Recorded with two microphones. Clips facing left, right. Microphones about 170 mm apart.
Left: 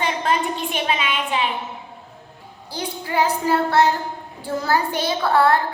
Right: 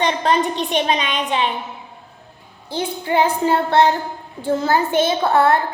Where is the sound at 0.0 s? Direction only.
35° right (ahead or behind).